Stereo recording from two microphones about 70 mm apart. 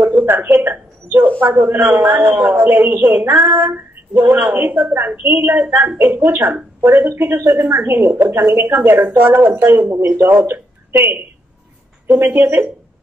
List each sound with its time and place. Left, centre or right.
0.0 s a woman's voice: right
12.1 s speech: right